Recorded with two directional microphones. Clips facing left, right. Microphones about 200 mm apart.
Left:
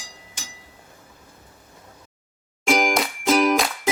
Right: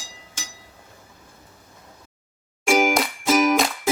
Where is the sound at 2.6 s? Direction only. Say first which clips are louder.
Right 2 dB; 5° right (ahead or behind).